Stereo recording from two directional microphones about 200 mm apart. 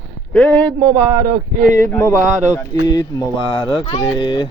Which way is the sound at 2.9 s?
20° left (ahead or behind).